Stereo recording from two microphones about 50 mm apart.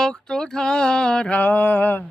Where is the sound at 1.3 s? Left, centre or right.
Left.